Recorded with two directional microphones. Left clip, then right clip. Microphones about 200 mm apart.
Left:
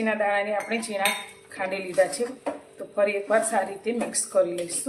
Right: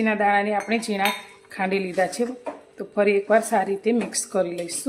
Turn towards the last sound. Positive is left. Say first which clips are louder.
# left 1 dB
turn(degrees=-50)  # may be behind; listen again after turning